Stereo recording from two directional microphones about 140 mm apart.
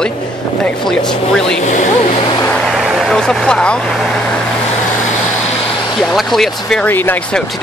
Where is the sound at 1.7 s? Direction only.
60° left (ahead or behind).